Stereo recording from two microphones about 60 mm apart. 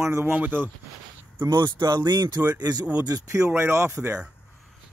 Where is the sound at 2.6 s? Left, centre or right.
Right.